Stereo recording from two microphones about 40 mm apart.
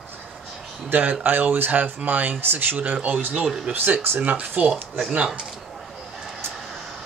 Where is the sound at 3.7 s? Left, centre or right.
Right.